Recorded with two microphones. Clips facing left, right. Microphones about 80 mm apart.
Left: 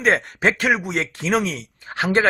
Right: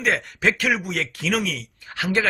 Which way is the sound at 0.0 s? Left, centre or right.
Left.